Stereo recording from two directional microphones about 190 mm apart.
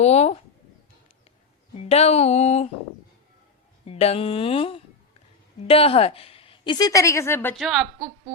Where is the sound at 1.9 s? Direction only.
35° left (ahead or behind).